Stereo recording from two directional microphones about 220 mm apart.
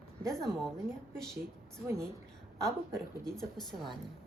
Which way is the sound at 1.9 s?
15° right (ahead or behind).